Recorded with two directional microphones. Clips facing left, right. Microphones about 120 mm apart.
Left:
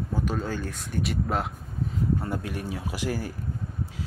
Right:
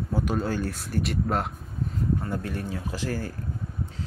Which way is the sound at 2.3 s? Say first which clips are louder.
Even; 15° left (ahead or behind).